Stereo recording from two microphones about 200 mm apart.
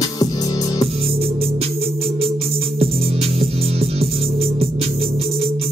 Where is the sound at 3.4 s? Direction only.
30° right (ahead or behind).